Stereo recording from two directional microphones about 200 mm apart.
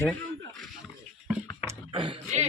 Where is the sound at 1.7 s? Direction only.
25° right (ahead or behind).